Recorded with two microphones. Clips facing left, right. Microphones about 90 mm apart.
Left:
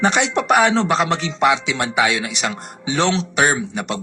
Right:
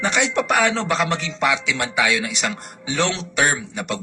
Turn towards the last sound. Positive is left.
turn(degrees=25)  # may be behind; listen again after turning